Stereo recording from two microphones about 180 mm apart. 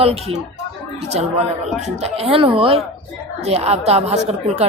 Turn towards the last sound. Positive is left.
turn(degrees=-35)  # may be behind; listen again after turning